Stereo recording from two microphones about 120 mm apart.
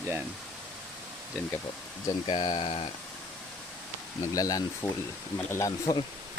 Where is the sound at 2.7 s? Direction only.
55° left (ahead or behind).